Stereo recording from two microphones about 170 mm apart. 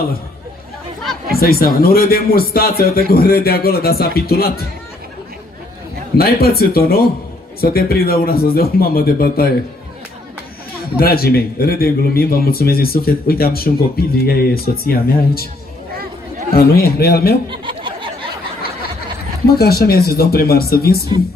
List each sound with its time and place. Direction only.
1.3 s a man's voice: 65° left (ahead or behind)
6.1 s a man's voice: 65° left (ahead or behind)
11.0 s a man's voice: 65° left (ahead or behind)
16.5 s a man's voice: 65° left (ahead or behind)
17.5 s a sound: 30° right (ahead or behind)
19.4 s a man's voice: 65° left (ahead or behind)